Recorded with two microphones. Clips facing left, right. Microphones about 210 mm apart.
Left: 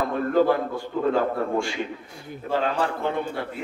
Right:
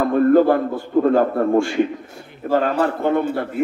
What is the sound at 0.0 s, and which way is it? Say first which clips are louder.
A man's voice: right 7 dB; 50° right (ahead or behind).